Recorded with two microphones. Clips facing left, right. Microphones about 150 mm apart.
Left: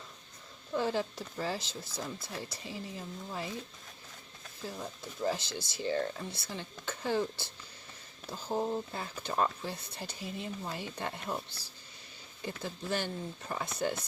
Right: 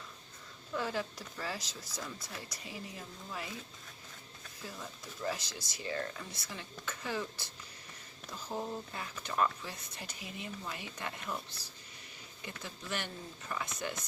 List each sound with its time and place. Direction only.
0.7 s speech: 30° left (ahead or behind)
4.8 s speech: 30° left (ahead or behind)